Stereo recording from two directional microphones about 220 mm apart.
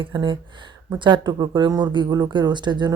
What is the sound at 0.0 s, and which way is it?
Speech, 20° right (ahead or behind).